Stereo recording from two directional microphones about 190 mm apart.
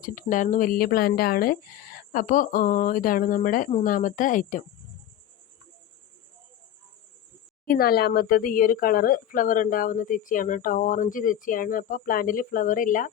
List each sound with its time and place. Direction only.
0.0 s a woman's voice: 45° left (ahead or behind)
7.6 s a woman's voice: 50° left (ahead or behind)